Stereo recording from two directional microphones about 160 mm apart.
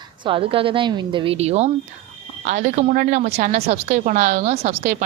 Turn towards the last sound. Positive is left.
turn(degrees=-45)  # may be behind; listen again after turning